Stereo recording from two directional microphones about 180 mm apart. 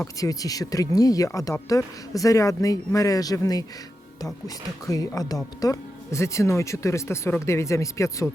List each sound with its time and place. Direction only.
0.2 s speech: 20° left (ahead or behind)